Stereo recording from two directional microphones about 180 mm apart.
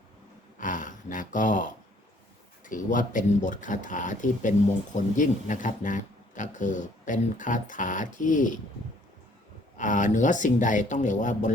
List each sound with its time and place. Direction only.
0.6 s a sound: 45° left (ahead or behind)
2.6 s speech: 45° left (ahead or behind)
9.7 s speech: 45° left (ahead or behind)